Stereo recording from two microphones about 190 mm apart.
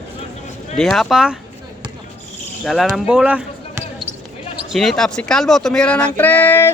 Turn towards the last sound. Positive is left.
turn(degrees=10)  # may be behind; listen again after turning